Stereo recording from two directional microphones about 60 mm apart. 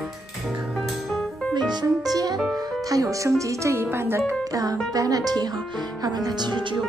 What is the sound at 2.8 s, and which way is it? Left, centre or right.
Speech, right.